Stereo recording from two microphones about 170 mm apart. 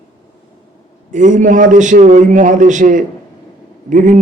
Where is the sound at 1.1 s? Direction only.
50° right (ahead or behind).